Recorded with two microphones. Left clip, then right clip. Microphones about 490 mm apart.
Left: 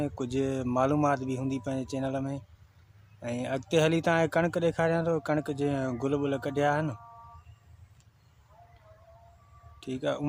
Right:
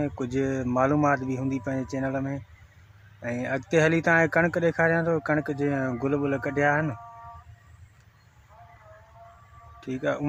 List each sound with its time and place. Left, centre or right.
0.0 s speech: left
10.0 s speech: left